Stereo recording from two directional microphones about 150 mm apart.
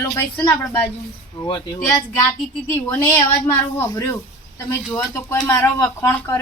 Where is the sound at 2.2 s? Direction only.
15° left (ahead or behind).